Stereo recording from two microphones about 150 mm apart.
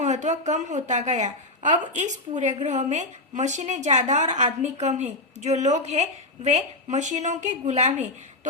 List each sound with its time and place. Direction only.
0.0 s a woman's voice: 50° right (ahead or behind)